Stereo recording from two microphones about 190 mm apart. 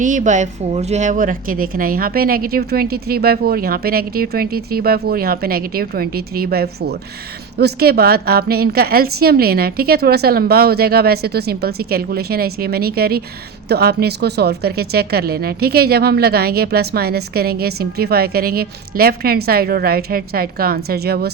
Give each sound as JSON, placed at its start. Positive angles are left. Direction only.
{"t": 0.0, "sound": "a woman's voice", "side_deg": -40}